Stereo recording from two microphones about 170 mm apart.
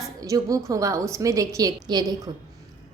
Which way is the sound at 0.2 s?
20° right (ahead or behind).